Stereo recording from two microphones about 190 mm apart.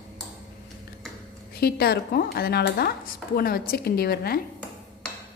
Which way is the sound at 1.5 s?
55° left (ahead or behind).